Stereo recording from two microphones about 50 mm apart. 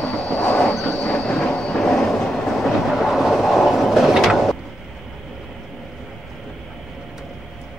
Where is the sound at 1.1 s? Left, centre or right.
Centre.